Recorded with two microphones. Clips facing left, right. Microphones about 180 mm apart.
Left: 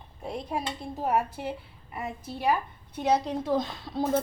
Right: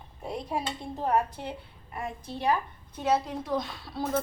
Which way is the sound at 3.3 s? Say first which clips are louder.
Left 4 dB; 25° left (ahead or behind).